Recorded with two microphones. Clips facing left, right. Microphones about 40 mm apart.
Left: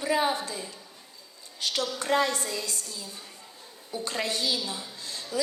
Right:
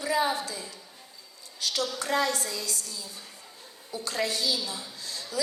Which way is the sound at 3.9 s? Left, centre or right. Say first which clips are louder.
Even; left.